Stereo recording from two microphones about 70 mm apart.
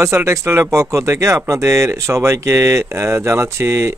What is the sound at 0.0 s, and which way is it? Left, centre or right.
Speech, right.